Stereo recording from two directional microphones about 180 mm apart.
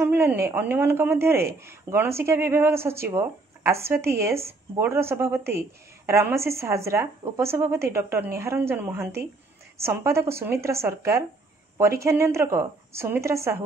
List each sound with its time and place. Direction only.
0.0 s speech: 10° right (ahead or behind)